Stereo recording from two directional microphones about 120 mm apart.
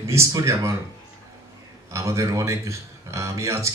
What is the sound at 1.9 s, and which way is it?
Speech, 25° right (ahead or behind).